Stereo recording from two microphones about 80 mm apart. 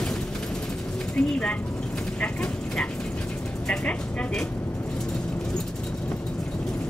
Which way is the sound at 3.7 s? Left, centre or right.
Centre.